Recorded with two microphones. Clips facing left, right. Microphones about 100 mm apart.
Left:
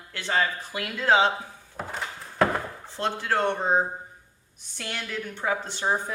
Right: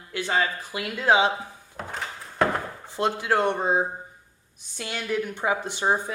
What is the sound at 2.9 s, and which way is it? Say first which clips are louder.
Speech: right 3 dB; 15° right (ahead or behind).